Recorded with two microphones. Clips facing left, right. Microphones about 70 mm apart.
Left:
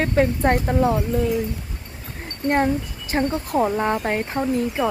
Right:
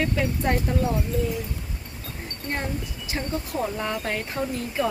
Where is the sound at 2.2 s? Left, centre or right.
Left.